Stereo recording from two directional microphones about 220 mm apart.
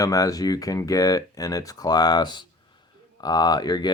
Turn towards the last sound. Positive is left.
turn(degrees=15)  # may be behind; listen again after turning